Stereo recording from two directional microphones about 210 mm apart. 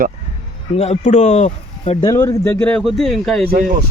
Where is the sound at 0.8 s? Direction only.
30° left (ahead or behind).